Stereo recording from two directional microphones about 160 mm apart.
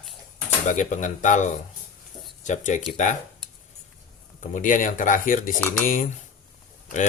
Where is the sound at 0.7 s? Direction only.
50° left (ahead or behind).